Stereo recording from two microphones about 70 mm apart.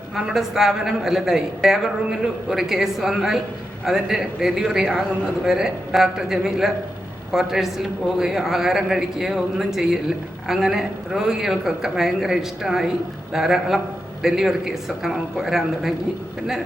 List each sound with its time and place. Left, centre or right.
0.3 s a woman's voice: centre